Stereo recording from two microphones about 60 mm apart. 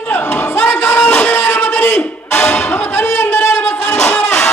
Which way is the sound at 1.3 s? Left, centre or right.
Left.